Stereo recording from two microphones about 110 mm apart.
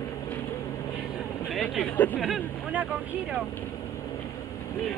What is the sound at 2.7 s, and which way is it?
Speech, 10° right (ahead or behind).